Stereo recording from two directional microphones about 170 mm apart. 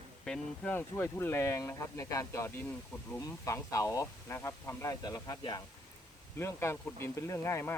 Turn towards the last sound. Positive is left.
turn(degrees=15)  # may be behind; listen again after turning